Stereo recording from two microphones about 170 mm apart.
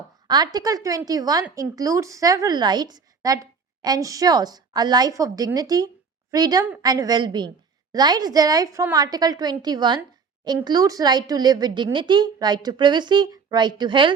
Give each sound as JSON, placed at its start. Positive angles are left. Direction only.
{"t": 0.3, "sound": "a woman's voice", "side_deg": -25}